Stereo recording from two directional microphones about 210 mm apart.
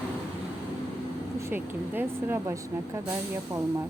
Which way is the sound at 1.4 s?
10° right (ahead or behind).